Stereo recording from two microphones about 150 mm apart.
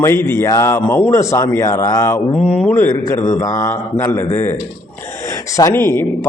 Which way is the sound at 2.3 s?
5° left (ahead or behind).